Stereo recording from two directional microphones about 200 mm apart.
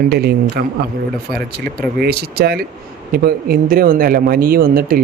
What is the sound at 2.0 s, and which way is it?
Speech, 50° right (ahead or behind).